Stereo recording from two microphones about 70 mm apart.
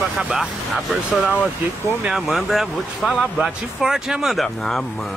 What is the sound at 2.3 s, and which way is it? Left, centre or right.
Speech, centre.